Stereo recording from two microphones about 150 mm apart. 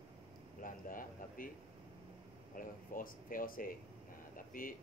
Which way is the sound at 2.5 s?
70° left (ahead or behind).